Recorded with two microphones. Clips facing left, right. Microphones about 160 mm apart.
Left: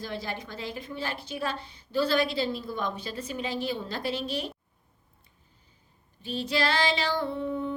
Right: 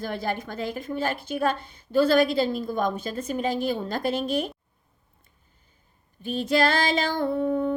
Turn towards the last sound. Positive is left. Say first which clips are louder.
# right 6 dB
turn(degrees=-50)  # may be behind; listen again after turning